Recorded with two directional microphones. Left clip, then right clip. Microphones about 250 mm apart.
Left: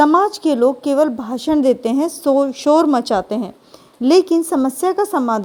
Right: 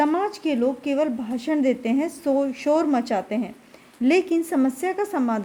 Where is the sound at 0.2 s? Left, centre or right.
Left.